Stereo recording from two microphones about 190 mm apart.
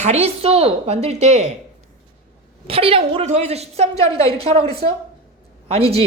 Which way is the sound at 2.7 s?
30° right (ahead or behind).